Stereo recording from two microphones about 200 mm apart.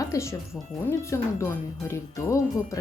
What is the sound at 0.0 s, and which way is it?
Speech, 15° left (ahead or behind).